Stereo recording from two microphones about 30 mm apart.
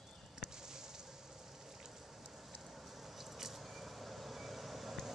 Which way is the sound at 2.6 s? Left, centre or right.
Centre.